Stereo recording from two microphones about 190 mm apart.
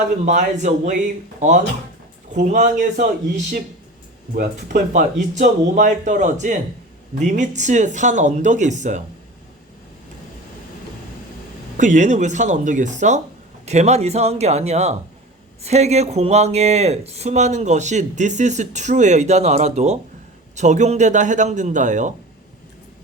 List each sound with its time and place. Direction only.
0.3 s speech: 40° right (ahead or behind)
11.8 s speech: 40° right (ahead or behind)